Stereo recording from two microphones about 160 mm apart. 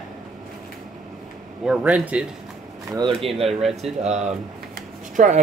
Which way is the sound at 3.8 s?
45° right (ahead or behind).